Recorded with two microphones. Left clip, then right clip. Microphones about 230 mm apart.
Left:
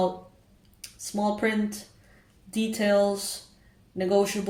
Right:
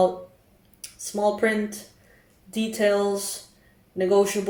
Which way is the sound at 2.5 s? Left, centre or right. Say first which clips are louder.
Right 1 dB; left.